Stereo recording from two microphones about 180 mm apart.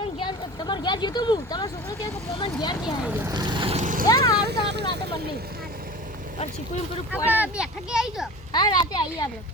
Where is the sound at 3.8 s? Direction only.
45° right (ahead or behind).